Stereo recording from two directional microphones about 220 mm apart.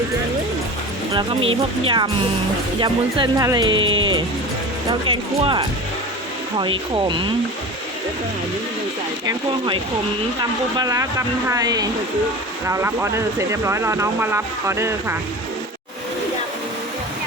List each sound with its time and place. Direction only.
1.5 s speech: 25° right (ahead or behind)
9.2 s speech: 20° right (ahead or behind)